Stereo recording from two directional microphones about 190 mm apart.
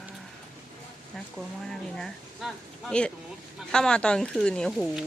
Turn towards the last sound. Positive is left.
turn(degrees=0)  # may be behind; listen again after turning